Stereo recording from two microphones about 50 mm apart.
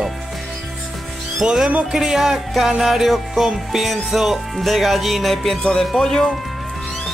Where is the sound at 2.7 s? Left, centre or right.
Centre.